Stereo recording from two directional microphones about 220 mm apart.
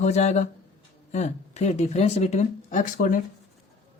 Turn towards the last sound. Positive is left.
turn(degrees=35)  # may be behind; listen again after turning